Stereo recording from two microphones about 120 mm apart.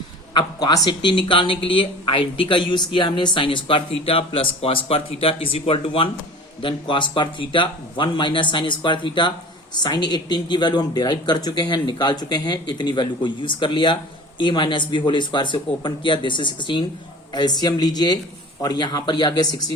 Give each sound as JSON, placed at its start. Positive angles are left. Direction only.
{"t": 0.3, "sound": "speech", "side_deg": 35}